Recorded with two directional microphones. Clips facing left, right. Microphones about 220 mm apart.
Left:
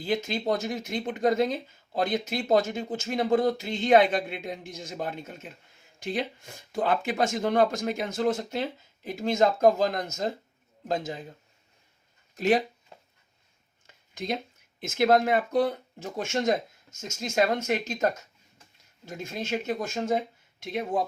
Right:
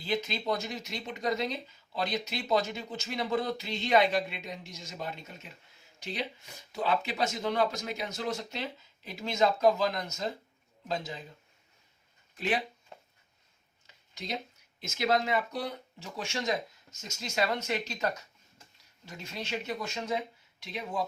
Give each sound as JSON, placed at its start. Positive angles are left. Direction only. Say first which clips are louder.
{"t": 0.0, "sound": "speech", "louder": "left 5 dB", "side_deg": 50}
{"t": 12.4, "sound": "speech", "louder": "left 8 dB", "side_deg": 40}
{"t": 13.8, "sound": "a sound", "louder": "left 9 dB", "side_deg": 50}
{"t": 14.8, "sound": "speech", "louder": "left 7 dB", "side_deg": 55}